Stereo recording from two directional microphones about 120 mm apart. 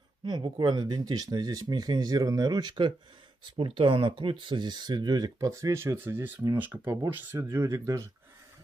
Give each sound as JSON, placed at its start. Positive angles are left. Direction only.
{"t": 0.2, "sound": "speech", "side_deg": -40}